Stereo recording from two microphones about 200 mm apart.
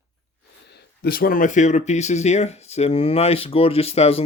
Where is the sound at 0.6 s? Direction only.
55° left (ahead or behind); by 4.2 s 30° left (ahead or behind).